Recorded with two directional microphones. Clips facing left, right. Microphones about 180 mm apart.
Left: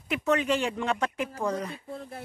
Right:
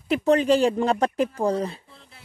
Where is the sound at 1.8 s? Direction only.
50° left (ahead or behind).